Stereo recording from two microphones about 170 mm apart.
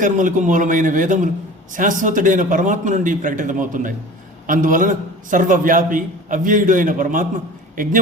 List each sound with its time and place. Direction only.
0.0 s a man's voice: 50° right (ahead or behind)